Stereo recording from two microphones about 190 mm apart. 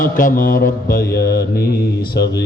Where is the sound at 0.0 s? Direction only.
45° left (ahead or behind).